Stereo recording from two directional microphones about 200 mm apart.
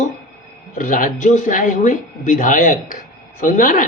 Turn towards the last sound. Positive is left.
turn(degrees=40)  # may be behind; listen again after turning